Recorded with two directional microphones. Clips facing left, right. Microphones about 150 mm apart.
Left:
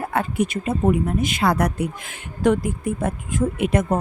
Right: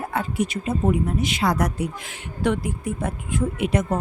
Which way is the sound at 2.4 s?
45° left (ahead or behind).